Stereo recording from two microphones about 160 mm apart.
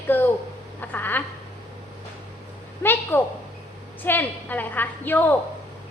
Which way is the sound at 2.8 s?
10° left (ahead or behind).